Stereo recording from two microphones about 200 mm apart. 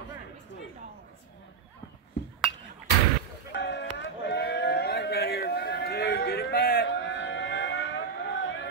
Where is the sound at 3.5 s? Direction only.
60° left (ahead or behind).